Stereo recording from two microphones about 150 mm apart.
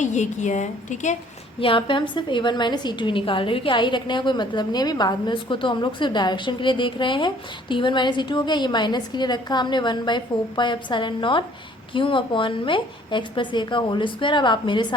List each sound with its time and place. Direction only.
0.0 s a woman's voice: 50° left (ahead or behind)
1.5 s a woman's voice: 35° left (ahead or behind)